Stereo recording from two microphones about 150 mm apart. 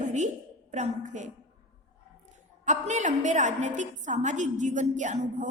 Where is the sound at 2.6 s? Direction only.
55° right (ahead or behind).